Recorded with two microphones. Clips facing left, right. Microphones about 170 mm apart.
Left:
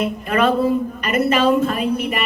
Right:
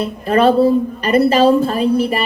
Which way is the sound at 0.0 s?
30° right (ahead or behind).